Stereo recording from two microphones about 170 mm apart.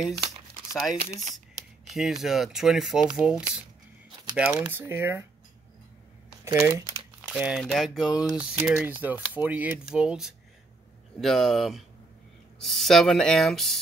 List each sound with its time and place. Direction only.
1.9 s speech: centre (ahead or behind)
6.4 s speech: 15° right (ahead or behind)
7.2 s speech: 5° right (ahead or behind)